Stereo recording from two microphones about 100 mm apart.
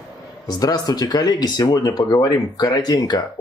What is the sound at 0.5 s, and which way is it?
Speech, 40° left (ahead or behind).